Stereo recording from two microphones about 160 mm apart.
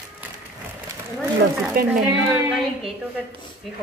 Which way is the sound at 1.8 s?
70° right (ahead or behind).